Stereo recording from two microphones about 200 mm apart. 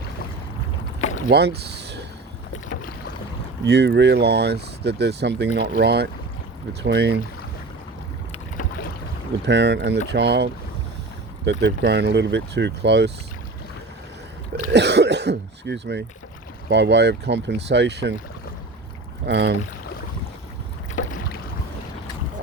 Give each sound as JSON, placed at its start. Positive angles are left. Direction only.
{"t": 1.3, "sound": "speech", "side_deg": -55}
{"t": 3.6, "sound": "speech", "side_deg": -60}
{"t": 9.5, "sound": "speech", "side_deg": -60}
{"t": 14.7, "sound": "speech", "side_deg": -60}
{"t": 19.2, "sound": "speech", "side_deg": -55}